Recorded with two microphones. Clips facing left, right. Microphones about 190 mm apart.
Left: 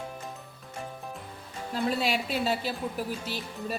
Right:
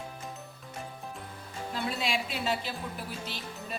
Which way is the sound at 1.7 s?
40° left (ahead or behind).